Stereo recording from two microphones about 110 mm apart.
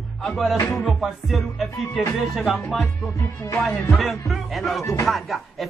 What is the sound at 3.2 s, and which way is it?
Music, 30° left (ahead or behind).